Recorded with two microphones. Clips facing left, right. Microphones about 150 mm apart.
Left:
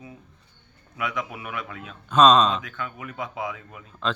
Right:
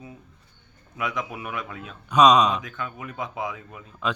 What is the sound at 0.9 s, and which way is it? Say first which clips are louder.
Speech: even; 25° right (ahead or behind).